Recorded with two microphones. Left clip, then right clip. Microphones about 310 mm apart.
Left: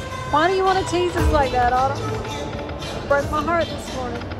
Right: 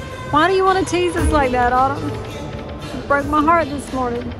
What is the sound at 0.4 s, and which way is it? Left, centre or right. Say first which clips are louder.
A woman's voice: right 4 dB; centre.